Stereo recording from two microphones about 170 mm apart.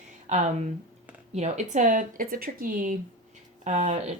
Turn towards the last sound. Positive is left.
turn(degrees=-45)  # may be behind; listen again after turning